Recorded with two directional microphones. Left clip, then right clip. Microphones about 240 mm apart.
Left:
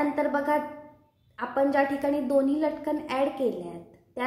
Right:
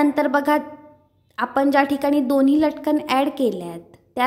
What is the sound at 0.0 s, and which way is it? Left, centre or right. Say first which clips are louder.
A woman's voice: right 7 dB; right.